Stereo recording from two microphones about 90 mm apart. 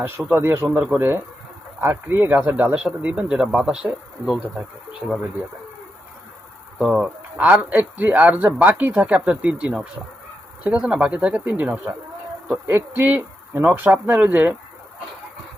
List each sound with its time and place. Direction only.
0.3 s speech: 25° right (ahead or behind); by 3.8 s 5° right (ahead or behind)
4.9 s speech: centre (ahead or behind)
6.7 s speech: 10° right (ahead or behind)
12.5 s speech: 35° right (ahead or behind)
12.9 s speech: 20° right (ahead or behind)